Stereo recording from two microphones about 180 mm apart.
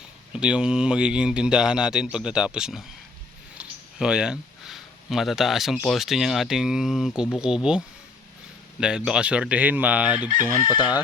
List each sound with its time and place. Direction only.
0.3 s speech: 5° right (ahead or behind)
10.7 s speech: 25° left (ahead or behind)